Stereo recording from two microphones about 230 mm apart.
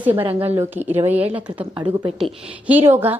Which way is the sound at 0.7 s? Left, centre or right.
Centre.